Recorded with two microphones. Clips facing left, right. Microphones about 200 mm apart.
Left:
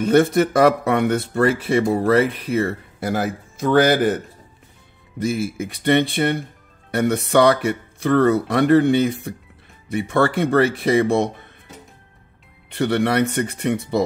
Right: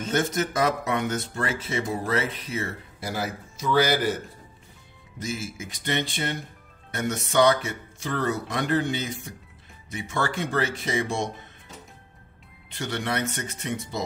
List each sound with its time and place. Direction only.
0.0 s speech: 60° left (ahead or behind)
5.2 s speech: 60° left (ahead or behind)
12.6 s speech: 60° left (ahead or behind)